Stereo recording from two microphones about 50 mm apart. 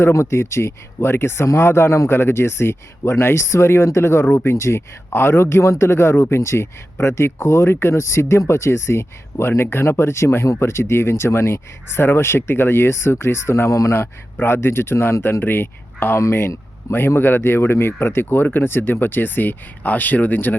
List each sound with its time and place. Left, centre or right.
0.1 s speech: left
2.0 s speech: left
13.9 s speech: left
17.2 s speech: left